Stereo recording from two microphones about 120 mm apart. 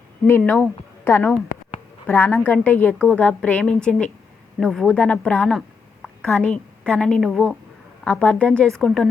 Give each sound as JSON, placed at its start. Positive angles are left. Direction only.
{"t": 0.3, "sound": "a woman's voice", "side_deg": 15}
{"t": 5.5, "sound": "a sound", "side_deg": 5}
{"t": 7.2, "sound": "a woman's voice", "side_deg": 0}
{"t": 8.0, "sound": "a woman's voice", "side_deg": 10}